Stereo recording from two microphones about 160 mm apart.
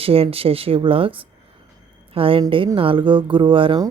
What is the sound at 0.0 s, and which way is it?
Speech, 35° right (ahead or behind).